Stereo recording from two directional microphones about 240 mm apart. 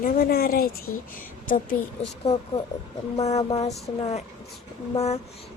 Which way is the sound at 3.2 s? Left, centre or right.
Left.